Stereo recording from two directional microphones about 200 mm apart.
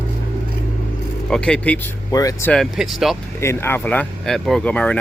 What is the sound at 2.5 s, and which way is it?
Speech, centre (ahead or behind).